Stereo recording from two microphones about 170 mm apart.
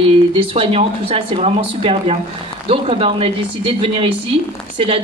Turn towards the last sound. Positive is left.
turn(degrees=-35)  # may be behind; listen again after turning